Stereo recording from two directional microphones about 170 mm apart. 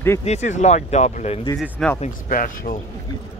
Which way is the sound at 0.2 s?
40° left (ahead or behind).